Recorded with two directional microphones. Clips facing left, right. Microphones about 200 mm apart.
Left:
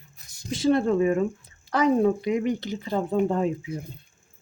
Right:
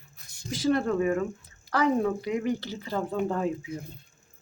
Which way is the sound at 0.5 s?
25° left (ahead or behind).